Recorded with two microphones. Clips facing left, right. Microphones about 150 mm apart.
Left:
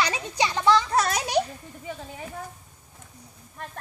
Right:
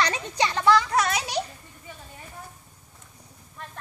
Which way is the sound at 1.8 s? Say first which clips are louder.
Left 8 dB; 90° left.